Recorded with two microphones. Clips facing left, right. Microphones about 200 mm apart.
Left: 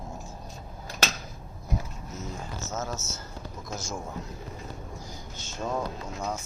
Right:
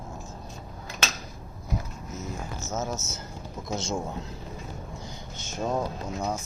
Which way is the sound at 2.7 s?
20° right (ahead or behind).